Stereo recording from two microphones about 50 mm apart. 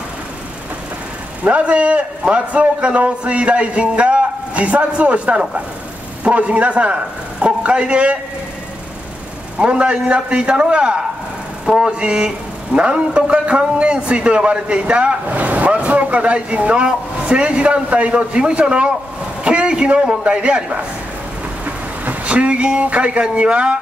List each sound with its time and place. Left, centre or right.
1.5 s a man's voice: right
9.6 s a man's voice: right